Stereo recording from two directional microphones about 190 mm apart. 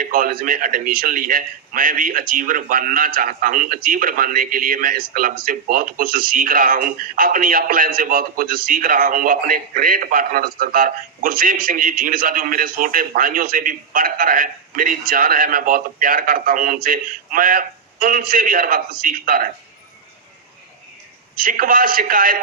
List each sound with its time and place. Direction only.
0.0 s a man's voice: 50° right (ahead or behind)
21.3 s a man's voice: 45° right (ahead or behind)